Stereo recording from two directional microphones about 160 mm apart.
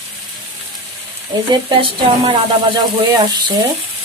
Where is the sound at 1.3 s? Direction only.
30° right (ahead or behind).